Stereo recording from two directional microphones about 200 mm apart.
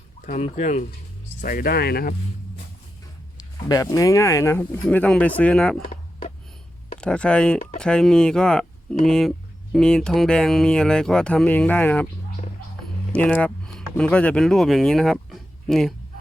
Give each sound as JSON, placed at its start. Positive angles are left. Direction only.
{"t": 0.3, "sound": "speech", "side_deg": 40}
{"t": 3.3, "sound": "speech", "side_deg": 20}
{"t": 7.0, "sound": "speech", "side_deg": 5}
{"t": 13.1, "sound": "speech", "side_deg": 5}